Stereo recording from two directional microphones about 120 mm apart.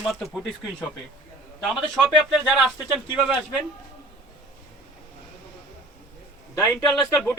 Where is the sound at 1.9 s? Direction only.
5° left (ahead or behind).